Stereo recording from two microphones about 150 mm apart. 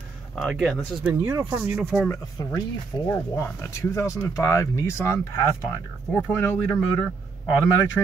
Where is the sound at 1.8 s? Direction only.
5° right (ahead or behind).